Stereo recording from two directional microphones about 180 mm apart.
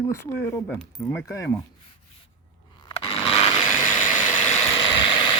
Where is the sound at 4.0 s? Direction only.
45° left (ahead or behind).